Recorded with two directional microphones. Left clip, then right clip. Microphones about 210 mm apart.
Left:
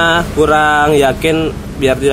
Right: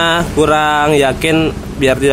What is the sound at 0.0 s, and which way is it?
Speech, 10° right (ahead or behind).